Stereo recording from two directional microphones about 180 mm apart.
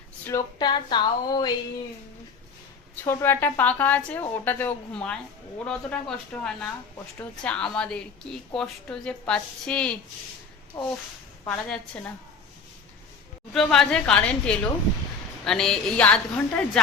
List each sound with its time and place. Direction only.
0.3 s speech: 20° left (ahead or behind)
2.9 s a woman's voice: 15° left (ahead or behind)
10.7 s a woman's voice: 15° left (ahead or behind)
11.4 s a woman's voice: 5° left (ahead or behind)
13.5 s a woman's voice: 5° left (ahead or behind)